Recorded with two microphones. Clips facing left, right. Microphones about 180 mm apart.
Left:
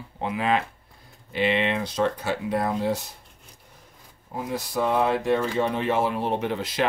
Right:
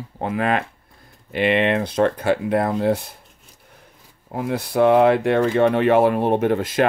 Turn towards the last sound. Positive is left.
turn(degrees=-50)  # may be behind; listen again after turning